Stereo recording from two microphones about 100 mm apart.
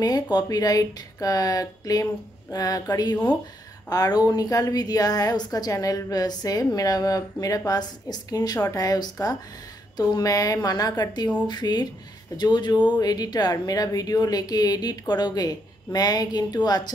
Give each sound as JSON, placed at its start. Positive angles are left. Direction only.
{"t": 0.0, "sound": "a woman's voice", "side_deg": 40}